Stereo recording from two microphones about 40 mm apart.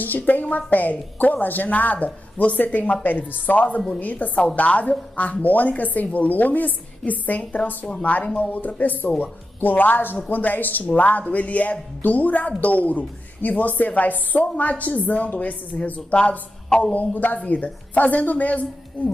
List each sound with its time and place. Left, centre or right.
0.0 s a woman's voice: left